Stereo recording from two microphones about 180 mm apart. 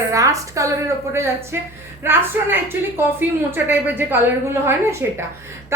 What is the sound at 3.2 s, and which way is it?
A woman's voice, 10° right (ahead or behind).